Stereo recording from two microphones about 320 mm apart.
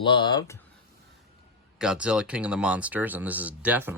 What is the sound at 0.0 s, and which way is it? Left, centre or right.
Speech, centre.